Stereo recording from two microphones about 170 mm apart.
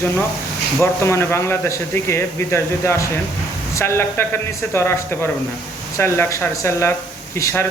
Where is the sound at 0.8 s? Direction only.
15° left (ahead or behind).